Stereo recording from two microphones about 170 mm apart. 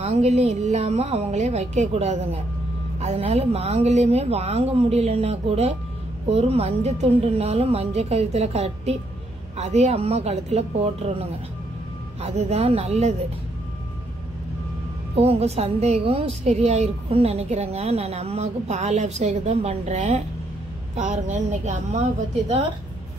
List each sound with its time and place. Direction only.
0.0 s a woman's voice: 40° right (ahead or behind)
15.1 s a woman's voice: 35° right (ahead or behind)